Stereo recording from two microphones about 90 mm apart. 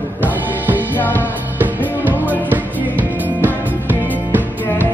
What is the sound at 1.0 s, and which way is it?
Music, 20° left (ahead or behind).